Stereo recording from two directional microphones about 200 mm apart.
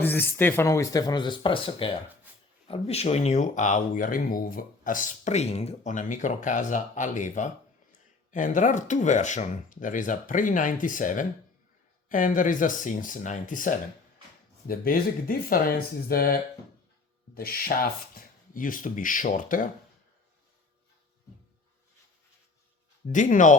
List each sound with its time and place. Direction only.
0.0 s speech: 10° left (ahead or behind); by 1.9 s 25° left (ahead or behind)
2.3 s a sound: 10° right (ahead or behind)
2.6 s speech: 30° left (ahead or behind)
23.0 s speech: 40° left (ahead or behind)